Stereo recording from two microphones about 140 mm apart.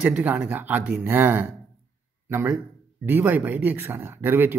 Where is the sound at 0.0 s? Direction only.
10° right (ahead or behind).